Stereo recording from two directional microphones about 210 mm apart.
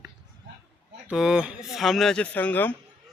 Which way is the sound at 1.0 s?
5° right (ahead or behind).